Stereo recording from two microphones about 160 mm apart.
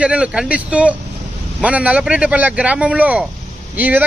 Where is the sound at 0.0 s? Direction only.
5° right (ahead or behind).